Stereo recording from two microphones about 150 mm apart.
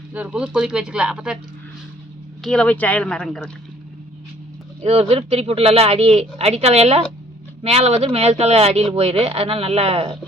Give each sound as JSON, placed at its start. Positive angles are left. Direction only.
{"t": 0.1, "sound": "speech", "side_deg": -5}
{"t": 2.4, "sound": "speech", "side_deg": 5}
{"t": 4.8, "sound": "speech", "side_deg": -45}